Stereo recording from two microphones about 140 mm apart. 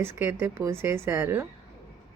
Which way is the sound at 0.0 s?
20° right (ahead or behind).